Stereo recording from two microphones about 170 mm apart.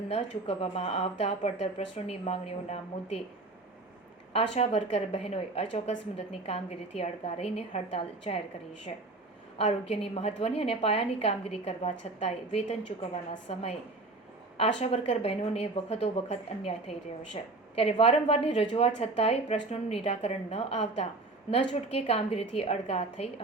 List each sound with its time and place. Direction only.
0.1 s a woman's voice: 35° left (ahead or behind)
4.5 s a woman's voice: 40° left (ahead or behind)
14.8 s a woman's voice: 40° left (ahead or behind)